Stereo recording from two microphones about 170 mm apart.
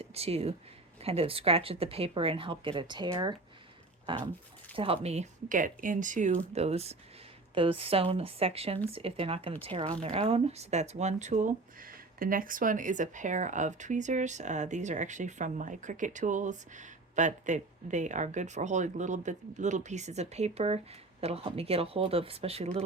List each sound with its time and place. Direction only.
0.0 s speech: 35° right (ahead or behind)